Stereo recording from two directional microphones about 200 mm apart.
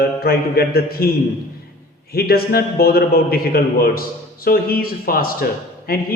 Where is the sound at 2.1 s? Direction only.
50° left (ahead or behind).